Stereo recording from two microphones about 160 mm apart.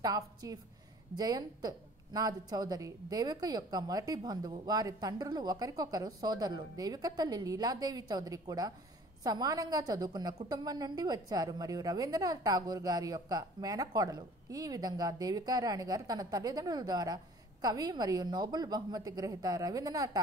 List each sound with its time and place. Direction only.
0.0 s a woman's voice: 25° right (ahead or behind)